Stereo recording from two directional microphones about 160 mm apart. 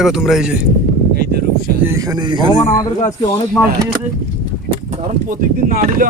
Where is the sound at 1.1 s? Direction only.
75° right (ahead or behind).